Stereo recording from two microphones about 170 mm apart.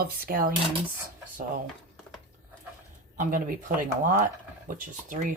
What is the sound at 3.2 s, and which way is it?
Speech, 55° right (ahead or behind).